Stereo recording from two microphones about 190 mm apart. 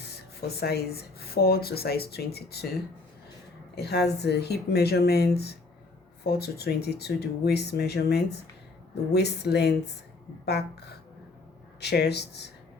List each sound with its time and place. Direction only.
0.0 s speech: 55° left (ahead or behind)
3.8 s speech: 60° left (ahead or behind)